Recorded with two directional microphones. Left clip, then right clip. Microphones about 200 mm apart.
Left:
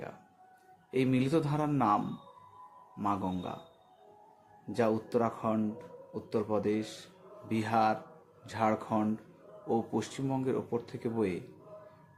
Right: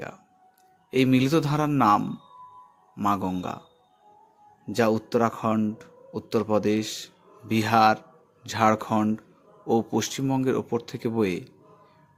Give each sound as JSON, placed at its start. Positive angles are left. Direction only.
{"t": 0.9, "sound": "speech", "side_deg": -50}
{"t": 4.7, "sound": "speech", "side_deg": -50}